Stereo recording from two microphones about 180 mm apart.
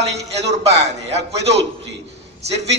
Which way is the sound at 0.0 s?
35° right (ahead or behind).